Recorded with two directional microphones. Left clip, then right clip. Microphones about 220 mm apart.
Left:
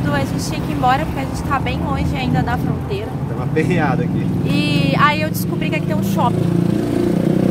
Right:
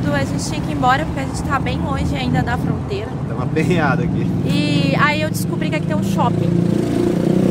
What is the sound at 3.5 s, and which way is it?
Speech, 20° right (ahead or behind).